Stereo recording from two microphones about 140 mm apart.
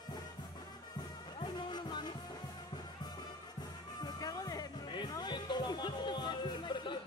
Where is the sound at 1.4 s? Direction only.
35° left (ahead or behind).